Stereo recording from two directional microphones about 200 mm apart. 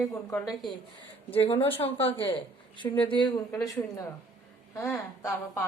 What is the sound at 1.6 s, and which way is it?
A woman's voice, 30° left (ahead or behind).